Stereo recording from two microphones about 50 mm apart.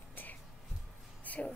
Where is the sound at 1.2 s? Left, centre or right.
Left.